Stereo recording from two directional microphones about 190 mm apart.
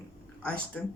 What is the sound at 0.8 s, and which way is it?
Speech, 5° left (ahead or behind).